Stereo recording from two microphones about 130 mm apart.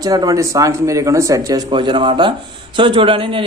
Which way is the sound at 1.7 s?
40° right (ahead or behind).